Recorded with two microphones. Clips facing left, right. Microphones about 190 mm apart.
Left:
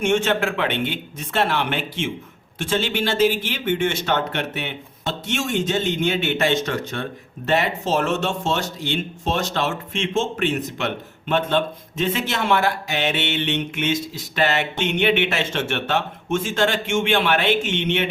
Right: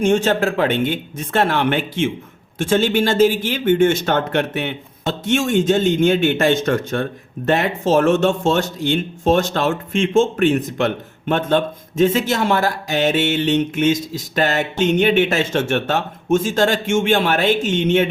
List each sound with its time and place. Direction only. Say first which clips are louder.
0.0 s speech: right 4 dB; 40° right (ahead or behind)